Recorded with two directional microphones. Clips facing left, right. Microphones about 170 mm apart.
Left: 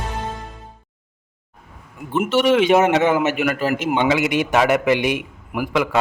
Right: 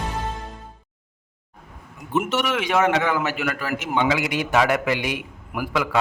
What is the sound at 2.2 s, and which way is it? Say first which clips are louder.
A man's voice: left 9 dB; 30° left (ahead or behind).